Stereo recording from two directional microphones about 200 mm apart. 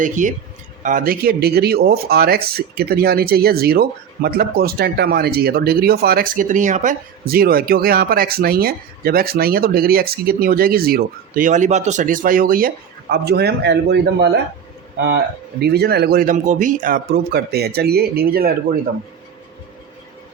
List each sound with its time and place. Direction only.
0.0 s speech: 40° right (ahead or behind); by 14.3 s 55° right (ahead or behind)
15.6 s speech: 55° right (ahead or behind)